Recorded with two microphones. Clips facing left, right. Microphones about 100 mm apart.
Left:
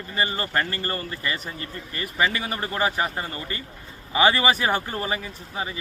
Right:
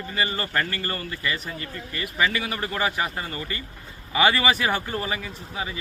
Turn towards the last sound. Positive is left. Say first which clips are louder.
# left 1 dB
turn(degrees=30)  # may be behind; listen again after turning